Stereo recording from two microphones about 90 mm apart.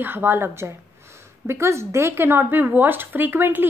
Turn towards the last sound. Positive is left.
turn(degrees=-25)  # may be behind; listen again after turning